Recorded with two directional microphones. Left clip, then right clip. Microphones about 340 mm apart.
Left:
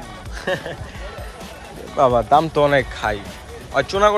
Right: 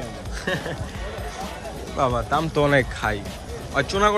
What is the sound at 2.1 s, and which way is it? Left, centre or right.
Speech, centre.